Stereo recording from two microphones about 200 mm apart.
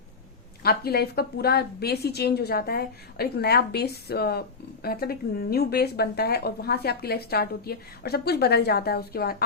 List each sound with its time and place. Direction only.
0.6 s a woman's voice: 50° left (ahead or behind)